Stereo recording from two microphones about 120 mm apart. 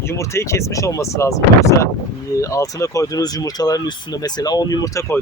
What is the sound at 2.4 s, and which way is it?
Speech, 25° left (ahead or behind).